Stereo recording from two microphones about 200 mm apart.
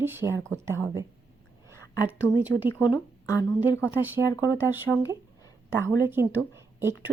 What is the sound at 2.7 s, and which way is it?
Speech, 15° left (ahead or behind).